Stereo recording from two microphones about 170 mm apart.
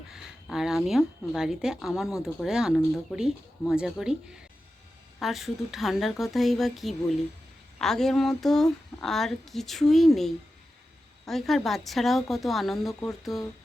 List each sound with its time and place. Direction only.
0.1 s a woman's voice: 5° right (ahead or behind)